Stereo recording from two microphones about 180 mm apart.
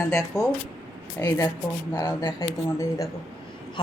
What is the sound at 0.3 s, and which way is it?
Speech, centre (ahead or behind).